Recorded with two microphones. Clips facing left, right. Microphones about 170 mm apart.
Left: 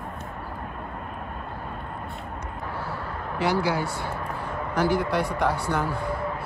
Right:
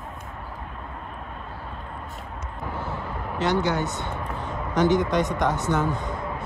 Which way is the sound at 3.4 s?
10° left (ahead or behind).